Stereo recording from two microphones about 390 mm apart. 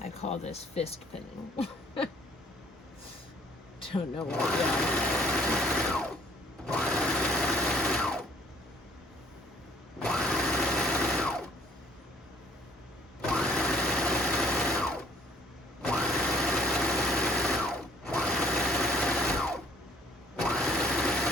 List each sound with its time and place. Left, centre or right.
0.0 s speech: centre
1.5 s a sound: centre
3.8 s vehicle: centre
4.2 s sewing machine: centre
10.0 s sewing machine: centre
13.2 s sewing machine: centre
15.9 s engine: centre
20.4 s sewing machine: centre